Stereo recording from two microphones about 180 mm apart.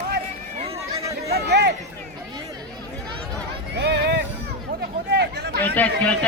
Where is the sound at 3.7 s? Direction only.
65° right (ahead or behind).